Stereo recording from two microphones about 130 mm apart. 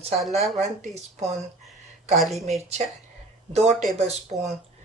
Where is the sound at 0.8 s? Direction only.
60° right (ahead or behind).